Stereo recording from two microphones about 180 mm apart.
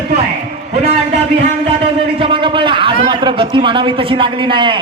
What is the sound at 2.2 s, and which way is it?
A man's voice, 30° right (ahead or behind).